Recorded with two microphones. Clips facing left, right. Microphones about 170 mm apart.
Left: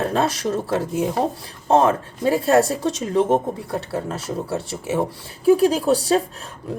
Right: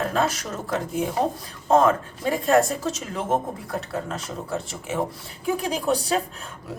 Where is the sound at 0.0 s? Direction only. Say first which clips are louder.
Left 3 dB; 30° left (ahead or behind).